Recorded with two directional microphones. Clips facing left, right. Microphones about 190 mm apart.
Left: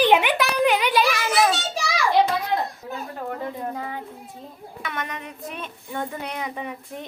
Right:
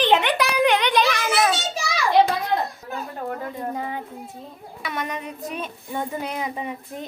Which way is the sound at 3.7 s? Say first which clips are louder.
Right 2 dB; 20° right (ahead or behind).